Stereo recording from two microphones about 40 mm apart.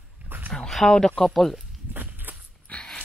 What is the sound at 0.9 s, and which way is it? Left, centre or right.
Speech, centre.